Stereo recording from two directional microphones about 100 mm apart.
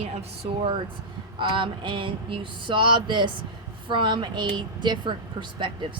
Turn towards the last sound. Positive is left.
turn(degrees=-50)  # may be behind; listen again after turning